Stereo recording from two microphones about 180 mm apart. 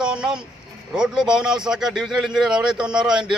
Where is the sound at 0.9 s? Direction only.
5° right (ahead or behind).